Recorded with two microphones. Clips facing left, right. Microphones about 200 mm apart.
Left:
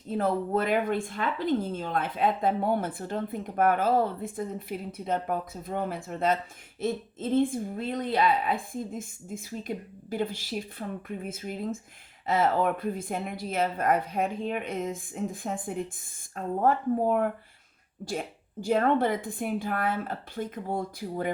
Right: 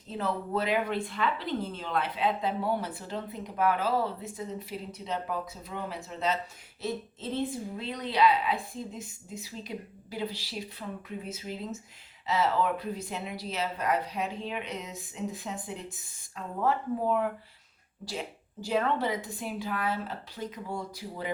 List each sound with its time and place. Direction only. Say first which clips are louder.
0.1 s speech: left 5 dB; 50° left (ahead or behind)